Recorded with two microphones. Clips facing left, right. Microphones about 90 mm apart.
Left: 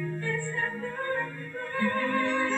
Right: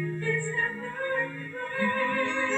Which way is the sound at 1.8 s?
35° left (ahead or behind).